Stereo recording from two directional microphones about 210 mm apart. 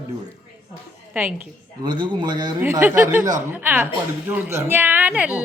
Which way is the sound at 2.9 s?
40° right (ahead or behind).